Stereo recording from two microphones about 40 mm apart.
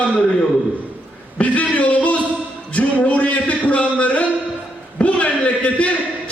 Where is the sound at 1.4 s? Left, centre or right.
Left.